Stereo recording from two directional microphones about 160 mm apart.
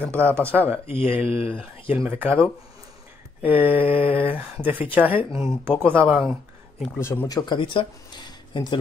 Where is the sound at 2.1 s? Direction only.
10° right (ahead or behind).